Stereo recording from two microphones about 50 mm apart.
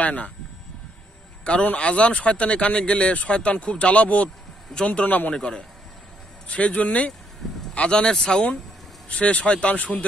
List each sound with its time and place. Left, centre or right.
0.0 s speech: left
1.4 s speech: left
5.3 s speech: centre
8.0 s speech: centre